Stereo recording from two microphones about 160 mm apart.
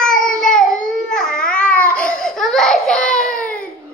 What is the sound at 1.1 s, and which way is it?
Babbling, 5° left (ahead or behind).